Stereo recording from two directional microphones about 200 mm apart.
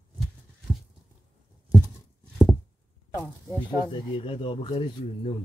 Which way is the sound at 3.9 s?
25° left (ahead or behind).